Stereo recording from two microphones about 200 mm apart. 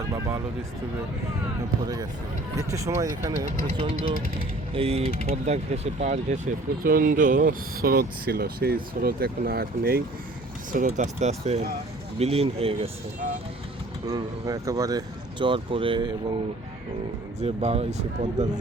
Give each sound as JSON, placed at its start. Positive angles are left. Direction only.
{"t": 0.1, "sound": "a sound", "side_deg": -15}
{"t": 1.8, "sound": "speech", "side_deg": -20}
{"t": 14.1, "sound": "speech", "side_deg": -15}
{"t": 17.4, "sound": "speech", "side_deg": -30}